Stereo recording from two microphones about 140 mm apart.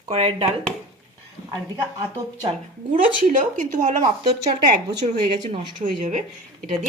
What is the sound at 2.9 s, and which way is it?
Speech, 65° right (ahead or behind).